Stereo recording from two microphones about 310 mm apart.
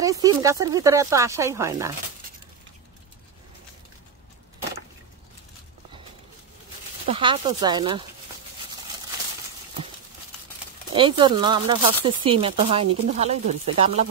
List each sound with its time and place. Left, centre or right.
0.0 s speech: centre
7.1 s speech: centre
11.0 s speech: centre